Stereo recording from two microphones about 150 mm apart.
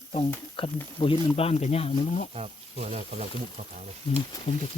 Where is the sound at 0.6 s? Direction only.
35° left (ahead or behind).